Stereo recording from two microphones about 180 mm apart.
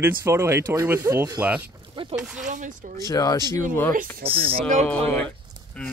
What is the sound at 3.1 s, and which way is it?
Speech, 20° left (ahead or behind).